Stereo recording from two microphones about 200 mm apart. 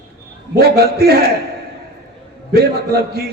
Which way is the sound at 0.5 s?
55° right (ahead or behind).